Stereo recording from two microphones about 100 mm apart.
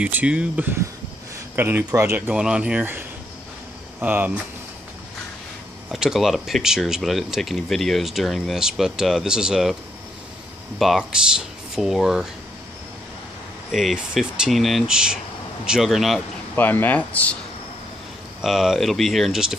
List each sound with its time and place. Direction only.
0.0 s speech: 15° right (ahead or behind)
2.1 s speech: 15° right (ahead or behind)
5.9 s speech: centre (ahead or behind)
10.8 s speech: centre (ahead or behind)
13.7 s speech: 5° right (ahead or behind)
16.5 s speech: 20° left (ahead or behind)
18.4 s speech: 5° right (ahead or behind)